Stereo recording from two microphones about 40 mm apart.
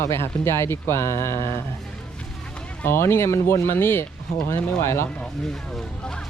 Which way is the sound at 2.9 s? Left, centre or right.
Left.